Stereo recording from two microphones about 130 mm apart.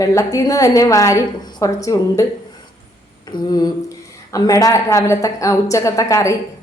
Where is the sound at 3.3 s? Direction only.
30° left (ahead or behind).